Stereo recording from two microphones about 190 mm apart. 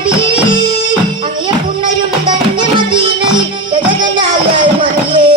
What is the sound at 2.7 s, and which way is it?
Music, 25° right (ahead or behind).